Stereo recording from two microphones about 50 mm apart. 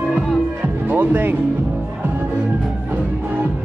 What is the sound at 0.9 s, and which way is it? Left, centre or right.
Music, right.